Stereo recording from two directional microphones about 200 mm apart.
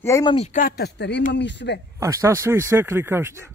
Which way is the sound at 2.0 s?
15° right (ahead or behind).